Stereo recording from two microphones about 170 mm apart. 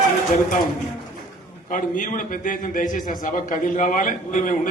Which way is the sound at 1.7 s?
50° left (ahead or behind).